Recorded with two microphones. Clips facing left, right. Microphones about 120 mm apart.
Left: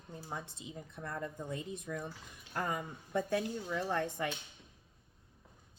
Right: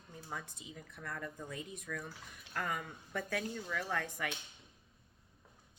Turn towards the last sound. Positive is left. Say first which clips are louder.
# left 4 dB
turn(degrees=30)  # may be behind; listen again after turning